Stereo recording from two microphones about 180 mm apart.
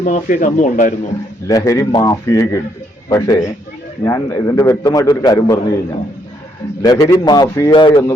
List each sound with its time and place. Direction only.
0.0 s speech: 45° left (ahead or behind)
1.5 s a man's voice: 20° left (ahead or behind)
6.8 s a man's voice: 20° left (ahead or behind)